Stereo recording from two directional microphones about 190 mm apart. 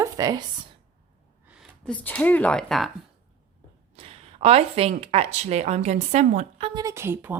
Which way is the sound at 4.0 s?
30° right (ahead or behind).